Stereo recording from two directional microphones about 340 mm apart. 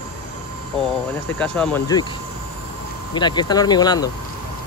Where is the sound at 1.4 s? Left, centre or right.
Centre.